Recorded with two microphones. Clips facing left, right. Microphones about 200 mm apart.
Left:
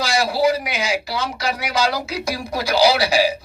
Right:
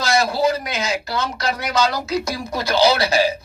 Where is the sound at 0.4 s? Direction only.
10° left (ahead or behind).